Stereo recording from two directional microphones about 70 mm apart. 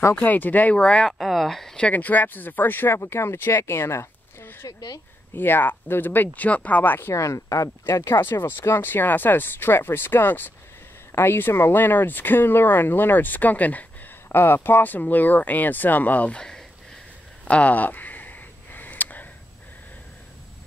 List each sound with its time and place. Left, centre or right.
0.2 s speech: left
0.7 s speech: centre
1.8 s speech: left
4.6 s speech: left
5.3 s speech: left
7.2 s speech: left
7.9 s speech: left; by 16.6 s centre
17.5 s a sound: centre